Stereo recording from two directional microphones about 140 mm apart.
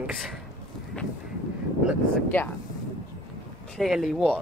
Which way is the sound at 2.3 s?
15° left (ahead or behind).